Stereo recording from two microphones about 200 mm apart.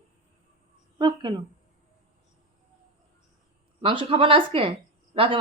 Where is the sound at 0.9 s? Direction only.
20° right (ahead or behind).